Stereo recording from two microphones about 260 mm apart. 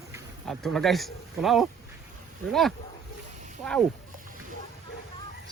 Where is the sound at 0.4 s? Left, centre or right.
Centre.